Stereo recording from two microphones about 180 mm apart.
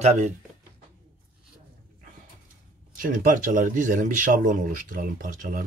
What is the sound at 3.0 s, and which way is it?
Speech, 50° right (ahead or behind).